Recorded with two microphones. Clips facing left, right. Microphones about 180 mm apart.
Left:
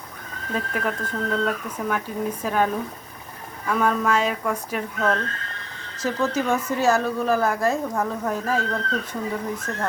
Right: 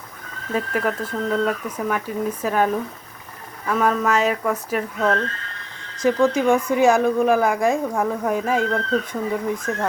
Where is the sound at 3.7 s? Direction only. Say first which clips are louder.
Right 2 dB; 5° right (ahead or behind).